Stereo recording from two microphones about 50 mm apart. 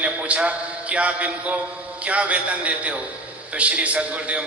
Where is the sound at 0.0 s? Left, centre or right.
Right.